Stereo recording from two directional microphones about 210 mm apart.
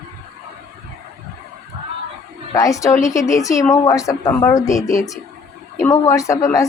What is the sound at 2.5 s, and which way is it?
A woman's voice, 15° left (ahead or behind).